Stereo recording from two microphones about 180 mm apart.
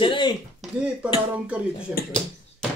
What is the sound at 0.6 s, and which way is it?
Speech, 5° right (ahead or behind).